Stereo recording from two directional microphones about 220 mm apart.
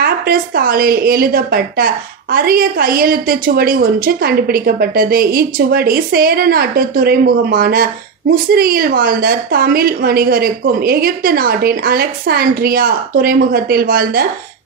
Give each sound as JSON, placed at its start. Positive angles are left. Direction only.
{"t": 0.0, "sound": "a woman's voice", "side_deg": -40}